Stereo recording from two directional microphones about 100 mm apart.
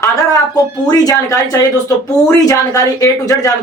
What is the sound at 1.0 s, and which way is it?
Speech, 35° left (ahead or behind).